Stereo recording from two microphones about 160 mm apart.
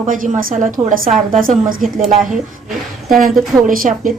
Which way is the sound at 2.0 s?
Centre (ahead or behind).